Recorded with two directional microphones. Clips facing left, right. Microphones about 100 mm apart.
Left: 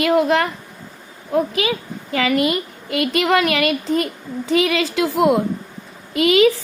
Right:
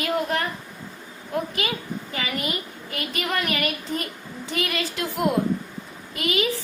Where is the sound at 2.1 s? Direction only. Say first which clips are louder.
Left 12 dB; 90° left.